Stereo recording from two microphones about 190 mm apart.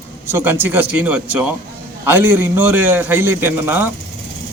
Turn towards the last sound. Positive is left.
turn(degrees=-10)  # may be behind; listen again after turning